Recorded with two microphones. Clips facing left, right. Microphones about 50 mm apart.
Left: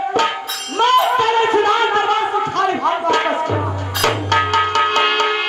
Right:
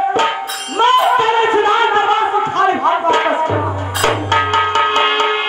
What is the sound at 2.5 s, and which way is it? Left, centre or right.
Crowd, centre.